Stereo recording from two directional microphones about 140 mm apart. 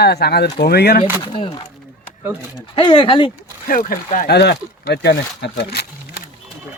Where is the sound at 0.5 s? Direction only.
90° left.